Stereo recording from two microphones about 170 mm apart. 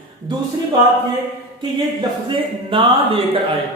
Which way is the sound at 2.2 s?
30° right (ahead or behind).